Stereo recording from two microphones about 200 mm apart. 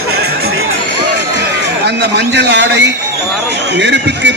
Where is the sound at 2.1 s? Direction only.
55° right (ahead or behind).